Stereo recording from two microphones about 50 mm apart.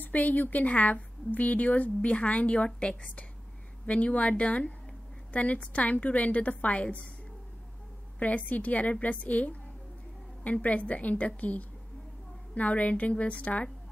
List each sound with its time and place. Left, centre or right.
0.0 s a woman's voice: left
8.2 s a woman's voice: left